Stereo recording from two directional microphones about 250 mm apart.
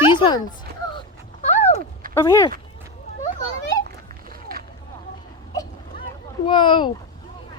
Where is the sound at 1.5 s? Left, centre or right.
Left.